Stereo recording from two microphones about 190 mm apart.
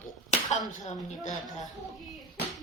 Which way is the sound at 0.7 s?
40° left (ahead or behind).